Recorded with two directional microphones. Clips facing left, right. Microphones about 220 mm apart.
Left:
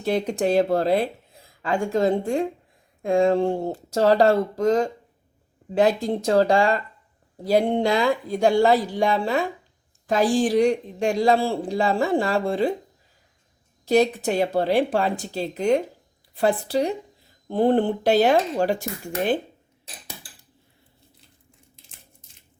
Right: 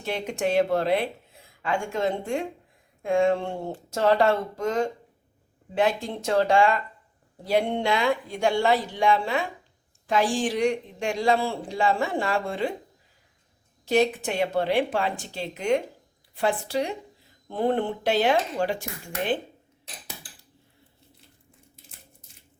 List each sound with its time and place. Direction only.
0.0 s speech: 35° left (ahead or behind)
13.8 s speech: 40° left (ahead or behind)